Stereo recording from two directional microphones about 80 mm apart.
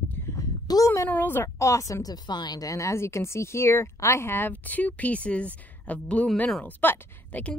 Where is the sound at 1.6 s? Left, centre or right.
Left.